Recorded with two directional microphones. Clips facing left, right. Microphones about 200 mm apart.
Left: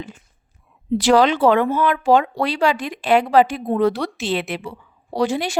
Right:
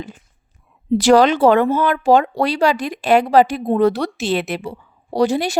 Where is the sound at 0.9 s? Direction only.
45° right (ahead or behind).